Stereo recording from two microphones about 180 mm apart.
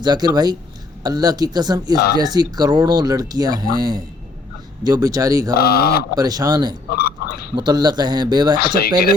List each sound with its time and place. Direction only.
0.0 s speech: 25° right (ahead or behind)
5.5 s speech: 60° left (ahead or behind)
6.1 s speech: 20° right (ahead or behind)
6.9 s gargling: 60° left (ahead or behind)
7.5 s speech: 25° right (ahead or behind)
8.6 s speech: 60° left (ahead or behind)